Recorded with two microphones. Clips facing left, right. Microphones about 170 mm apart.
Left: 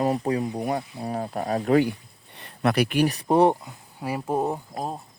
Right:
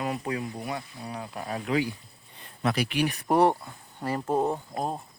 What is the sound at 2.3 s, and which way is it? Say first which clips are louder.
Speech: left 5 dB; 70° left (ahead or behind).